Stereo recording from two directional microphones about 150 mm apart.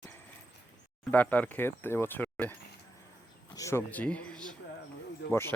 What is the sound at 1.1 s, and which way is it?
Speech, 10° left (ahead or behind).